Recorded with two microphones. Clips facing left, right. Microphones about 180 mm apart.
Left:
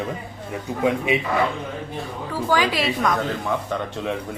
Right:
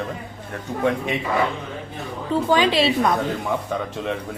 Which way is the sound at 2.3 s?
25° right (ahead or behind).